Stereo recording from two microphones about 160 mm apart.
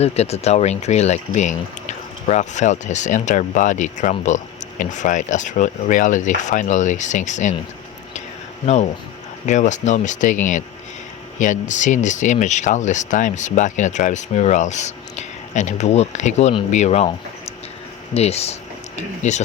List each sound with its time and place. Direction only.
0.0 s speech: 40° left (ahead or behind)
8.6 s speech: 45° left (ahead or behind)